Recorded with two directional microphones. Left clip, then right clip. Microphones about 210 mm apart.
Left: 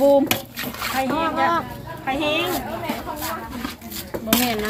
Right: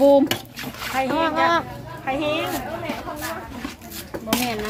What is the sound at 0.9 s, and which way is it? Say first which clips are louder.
A woman's voice: right 1 dB; 25° right (ahead or behind).